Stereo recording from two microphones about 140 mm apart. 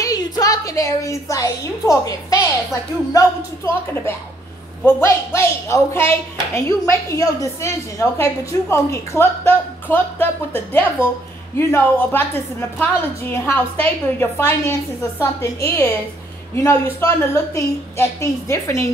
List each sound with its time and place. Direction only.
0.0 s a woman's voice: 25° left (ahead or behind)